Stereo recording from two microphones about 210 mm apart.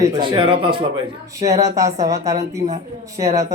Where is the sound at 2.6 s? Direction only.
40° right (ahead or behind).